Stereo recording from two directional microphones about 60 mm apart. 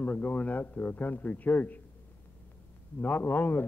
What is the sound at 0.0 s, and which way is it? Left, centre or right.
A man's voice, left.